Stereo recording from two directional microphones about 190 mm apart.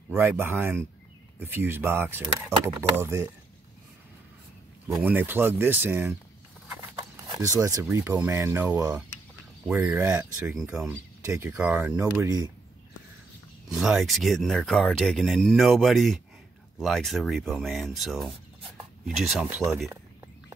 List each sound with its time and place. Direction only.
0.1 s speech: 10° right (ahead or behind)
4.8 s speech: 10° right (ahead or behind)
7.3 s speech: 15° right (ahead or behind)
12.0 s speech: 20° right (ahead or behind)
13.7 s speech: centre (ahead or behind)